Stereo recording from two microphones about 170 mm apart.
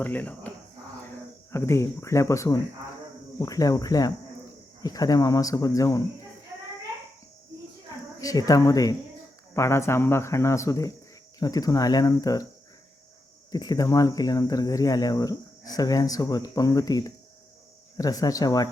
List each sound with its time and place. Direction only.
0.0 s speech: 10° left (ahead or behind)
8.2 s speech: 20° left (ahead or behind)
13.5 s speech: 25° left (ahead or behind)